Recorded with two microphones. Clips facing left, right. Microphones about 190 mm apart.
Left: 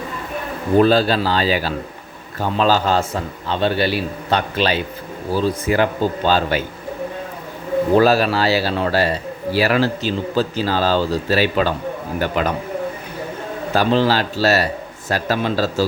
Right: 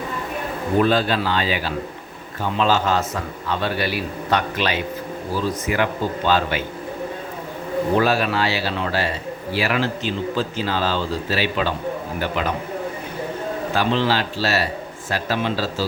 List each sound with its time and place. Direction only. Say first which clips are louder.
0.8 s a man's voice: left 4 dB; 35° left (ahead or behind)
7.9 s a man's voice: left 5 dB; 35° left (ahead or behind)
13.7 s a man's voice: left 5 dB; 40° left (ahead or behind)